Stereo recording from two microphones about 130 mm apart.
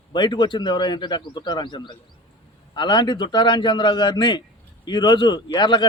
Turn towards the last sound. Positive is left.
turn(degrees=35)  # may be behind; listen again after turning